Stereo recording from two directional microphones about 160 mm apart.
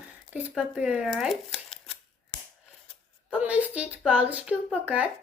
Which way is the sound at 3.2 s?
10° right (ahead or behind).